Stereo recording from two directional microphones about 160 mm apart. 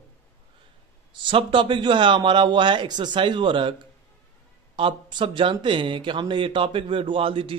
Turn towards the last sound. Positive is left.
turn(degrees=-35)  # may be behind; listen again after turning